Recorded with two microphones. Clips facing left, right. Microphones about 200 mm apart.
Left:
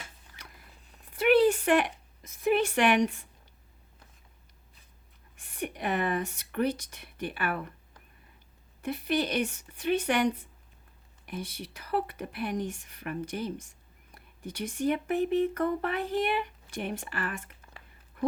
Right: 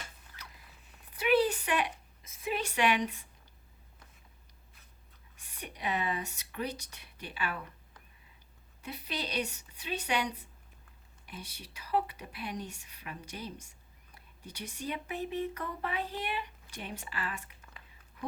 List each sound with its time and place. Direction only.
1.2 s a sound: 55° left (ahead or behind)
2.5 s a woman's voice: 50° left (ahead or behind)
5.4 s speech: 55° left (ahead or behind)
8.8 s a woman's voice: 55° left (ahead or behind)
11.3 s speech: 55° left (ahead or behind)
14.5 s speech: 50° left (ahead or behind)